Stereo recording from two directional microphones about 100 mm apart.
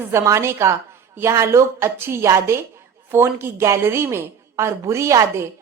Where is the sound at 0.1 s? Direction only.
30° right (ahead or behind).